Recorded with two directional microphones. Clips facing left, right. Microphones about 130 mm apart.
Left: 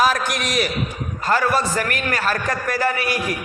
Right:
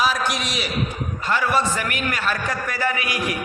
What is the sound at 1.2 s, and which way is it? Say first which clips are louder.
A man's voice: left 2 dB; 40° left (ahead or behind).